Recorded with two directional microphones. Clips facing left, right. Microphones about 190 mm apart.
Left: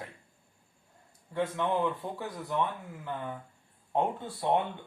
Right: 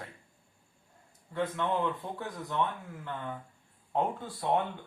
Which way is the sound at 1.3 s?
10° left (ahead or behind).